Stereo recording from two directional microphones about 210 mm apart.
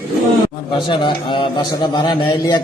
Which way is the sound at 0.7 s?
20° left (ahead or behind).